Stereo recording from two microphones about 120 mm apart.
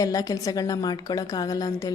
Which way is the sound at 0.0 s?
30° left (ahead or behind).